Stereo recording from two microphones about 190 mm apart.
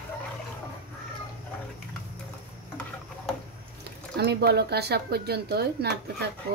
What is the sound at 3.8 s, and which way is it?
Speech, 60° right (ahead or behind).